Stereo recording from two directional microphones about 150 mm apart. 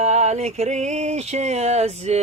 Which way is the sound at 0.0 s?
50° right (ahead or behind).